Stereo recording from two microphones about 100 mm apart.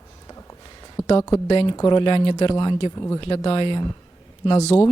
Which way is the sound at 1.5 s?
65° left (ahead or behind).